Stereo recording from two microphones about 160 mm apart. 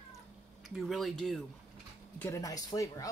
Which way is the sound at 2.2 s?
20° left (ahead or behind).